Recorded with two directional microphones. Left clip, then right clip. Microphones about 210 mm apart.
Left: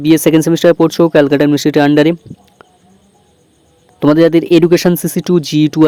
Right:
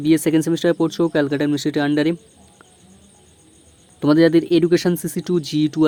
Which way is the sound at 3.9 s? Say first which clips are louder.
Left 6 dB; 35° left (ahead or behind).